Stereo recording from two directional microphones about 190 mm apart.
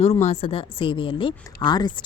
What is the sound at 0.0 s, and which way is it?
Speech, 35° left (ahead or behind).